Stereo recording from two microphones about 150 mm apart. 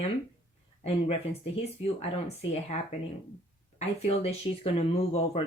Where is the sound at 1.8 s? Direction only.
45° left (ahead or behind).